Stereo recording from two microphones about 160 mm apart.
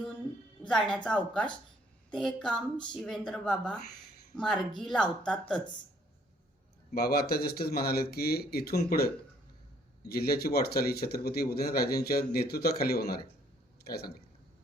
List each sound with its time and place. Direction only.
0.7 s speech: 5° left (ahead or behind)
6.9 s speech: 75° left (ahead or behind)
10.1 s speech: 75° left (ahead or behind)